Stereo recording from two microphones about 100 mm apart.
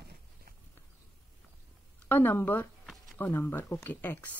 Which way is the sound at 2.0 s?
20° left (ahead or behind).